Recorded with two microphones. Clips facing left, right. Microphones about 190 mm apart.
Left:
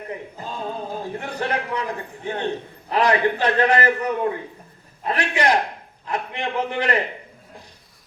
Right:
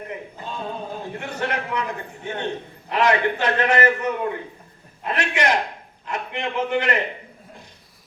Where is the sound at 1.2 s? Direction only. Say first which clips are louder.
Even; 35° left (ahead or behind).